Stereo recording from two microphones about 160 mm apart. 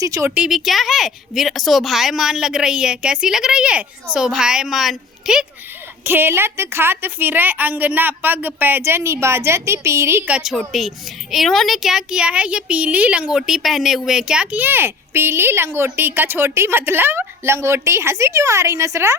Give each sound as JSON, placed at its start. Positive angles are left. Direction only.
{"t": 0.0, "sound": "speech", "side_deg": -20}
{"t": 0.3, "sound": "a woman's voice", "side_deg": -5}